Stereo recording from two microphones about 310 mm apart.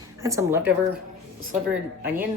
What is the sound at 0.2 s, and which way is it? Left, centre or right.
Speech, centre.